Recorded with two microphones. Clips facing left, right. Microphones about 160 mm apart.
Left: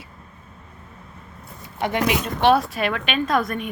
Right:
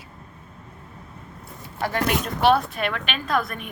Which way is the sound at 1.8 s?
20° left (ahead or behind).